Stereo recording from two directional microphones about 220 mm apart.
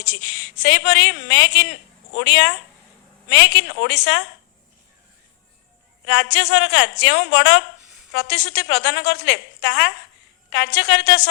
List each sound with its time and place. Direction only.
0.0 s a woman's voice: 55° left (ahead or behind)
6.1 s a woman's voice: 55° left (ahead or behind)